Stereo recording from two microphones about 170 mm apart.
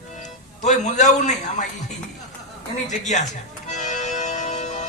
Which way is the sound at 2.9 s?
45° left (ahead or behind).